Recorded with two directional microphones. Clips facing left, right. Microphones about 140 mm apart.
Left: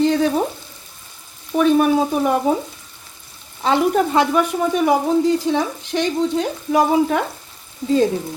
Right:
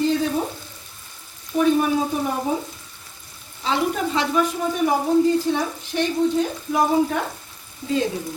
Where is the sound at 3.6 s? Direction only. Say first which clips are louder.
Left 6 dB; 55° left (ahead or behind).